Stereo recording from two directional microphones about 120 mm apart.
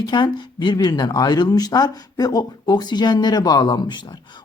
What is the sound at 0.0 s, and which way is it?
Speech, 40° left (ahead or behind).